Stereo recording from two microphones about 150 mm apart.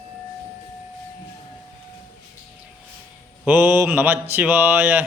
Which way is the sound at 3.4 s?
15° right (ahead or behind).